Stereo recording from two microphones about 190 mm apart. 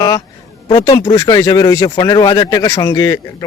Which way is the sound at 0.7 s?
20° left (ahead or behind).